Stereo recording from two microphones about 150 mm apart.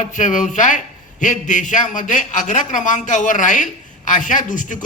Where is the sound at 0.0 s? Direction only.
55° left (ahead or behind).